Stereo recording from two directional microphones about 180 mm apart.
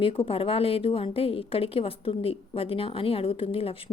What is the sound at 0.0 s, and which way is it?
A woman's voice, 30° left (ahead or behind).